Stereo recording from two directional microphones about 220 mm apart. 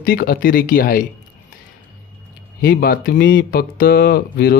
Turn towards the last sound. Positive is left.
turn(degrees=45)  # may be behind; listen again after turning